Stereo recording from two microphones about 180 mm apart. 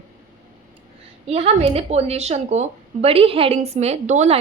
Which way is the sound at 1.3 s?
35° right (ahead or behind).